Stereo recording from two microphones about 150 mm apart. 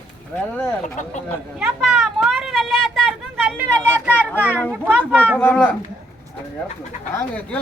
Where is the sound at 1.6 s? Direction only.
5° right (ahead or behind).